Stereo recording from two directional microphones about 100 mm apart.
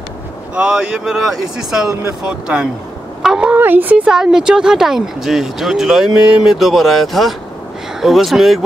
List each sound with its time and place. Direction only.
0.6 s speech: 5° right (ahead or behind)